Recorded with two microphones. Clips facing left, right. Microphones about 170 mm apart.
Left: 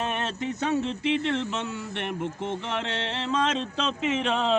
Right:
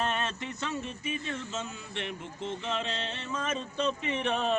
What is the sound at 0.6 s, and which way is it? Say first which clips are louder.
Speech: left 10 dB; 80° left.